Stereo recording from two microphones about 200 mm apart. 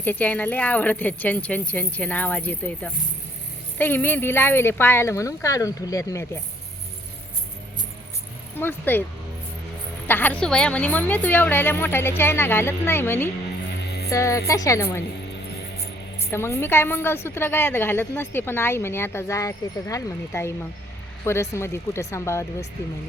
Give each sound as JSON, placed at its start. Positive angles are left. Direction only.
{"t": 0.0, "sound": "a woman's voice", "side_deg": 10}
{"t": 8.5, "sound": "a woman's voice", "side_deg": 10}
{"t": 10.1, "sound": "a woman's voice", "side_deg": 10}
{"t": 16.3, "sound": "a woman's voice", "side_deg": 10}